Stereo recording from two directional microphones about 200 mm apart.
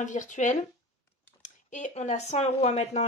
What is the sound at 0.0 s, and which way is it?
Speech, 40° left (ahead or behind).